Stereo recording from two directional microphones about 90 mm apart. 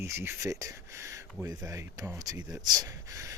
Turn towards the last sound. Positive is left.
turn(degrees=-40)  # may be behind; listen again after turning